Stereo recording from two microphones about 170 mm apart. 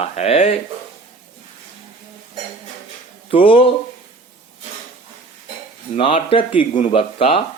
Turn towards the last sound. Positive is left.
turn(degrees=35)  # may be behind; listen again after turning